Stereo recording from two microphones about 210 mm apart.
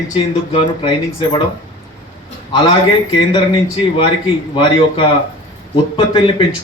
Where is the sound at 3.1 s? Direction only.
25° left (ahead or behind).